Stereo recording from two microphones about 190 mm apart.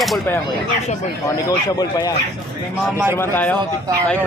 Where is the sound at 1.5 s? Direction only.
20° left (ahead or behind).